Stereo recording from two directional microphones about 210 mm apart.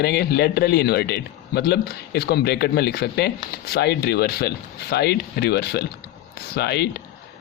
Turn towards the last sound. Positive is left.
turn(degrees=50)  # may be behind; listen again after turning